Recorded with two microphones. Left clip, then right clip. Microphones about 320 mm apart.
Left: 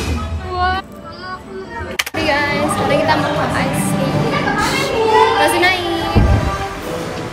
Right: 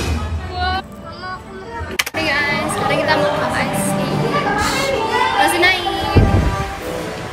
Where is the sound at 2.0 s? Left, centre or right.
Centre.